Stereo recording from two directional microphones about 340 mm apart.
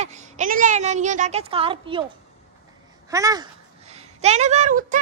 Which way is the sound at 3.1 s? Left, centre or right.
Centre.